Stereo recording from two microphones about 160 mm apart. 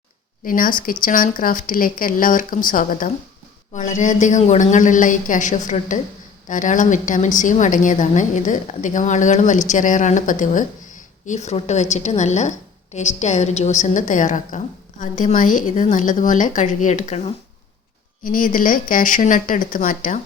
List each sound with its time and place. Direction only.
0.4 s a woman's voice: 60° left (ahead or behind)
18.2 s speech: 60° left (ahead or behind)